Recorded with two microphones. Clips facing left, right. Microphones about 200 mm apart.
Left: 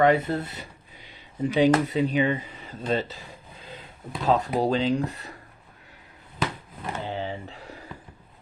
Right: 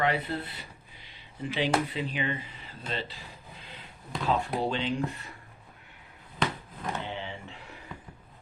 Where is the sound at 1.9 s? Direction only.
45° left (ahead or behind).